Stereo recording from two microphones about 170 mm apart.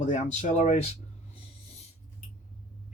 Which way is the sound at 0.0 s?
45° left (ahead or behind).